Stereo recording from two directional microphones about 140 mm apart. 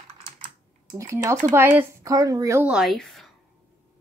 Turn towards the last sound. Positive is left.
turn(degrees=0)  # may be behind; listen again after turning